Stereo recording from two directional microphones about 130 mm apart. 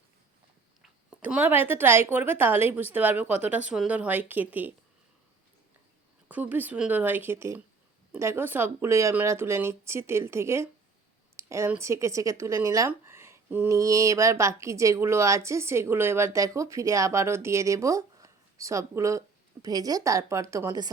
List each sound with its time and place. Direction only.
1.2 s a woman's voice: 15° right (ahead or behind)
6.2 s a woman's voice: 15° right (ahead or behind)
11.3 s a sound: 20° right (ahead or behind)
11.8 s speech: 25° right (ahead or behind)